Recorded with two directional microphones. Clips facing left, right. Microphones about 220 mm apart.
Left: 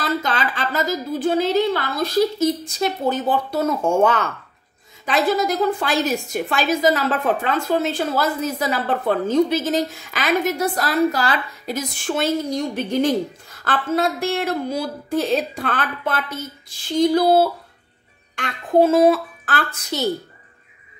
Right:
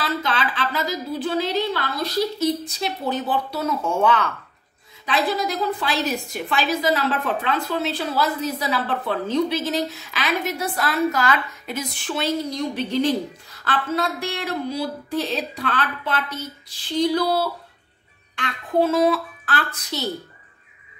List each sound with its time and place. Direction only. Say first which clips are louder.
0.0 s a woman's voice: left 2 dB; 45° left (ahead or behind)